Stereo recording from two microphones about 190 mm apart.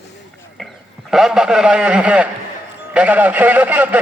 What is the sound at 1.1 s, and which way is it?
A man's voice, centre (ahead or behind).